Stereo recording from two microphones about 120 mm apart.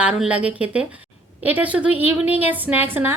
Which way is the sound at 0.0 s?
10° right (ahead or behind).